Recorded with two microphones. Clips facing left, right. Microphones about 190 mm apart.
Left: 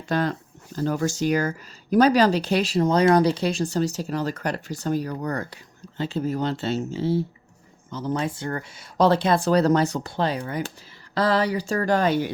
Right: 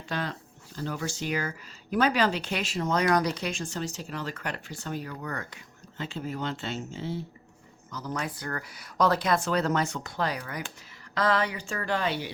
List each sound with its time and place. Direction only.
0.1 s speech: 45° left (ahead or behind)